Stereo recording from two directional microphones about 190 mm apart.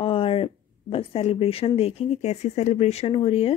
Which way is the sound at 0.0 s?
30° left (ahead or behind).